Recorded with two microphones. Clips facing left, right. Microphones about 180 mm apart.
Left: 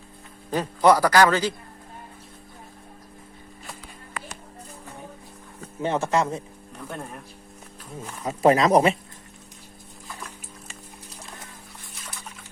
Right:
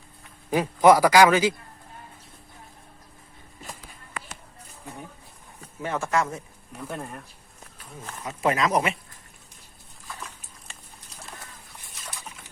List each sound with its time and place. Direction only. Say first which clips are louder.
0.5 s a man's voice: right 2 dB; 10° right (ahead or behind)
5.8 s speech: left 3 dB; 25° left (ahead or behind)
6.7 s speech: right 1 dB; 5° right (ahead or behind)
8.2 s speech: left 6 dB; 35° left (ahead or behind)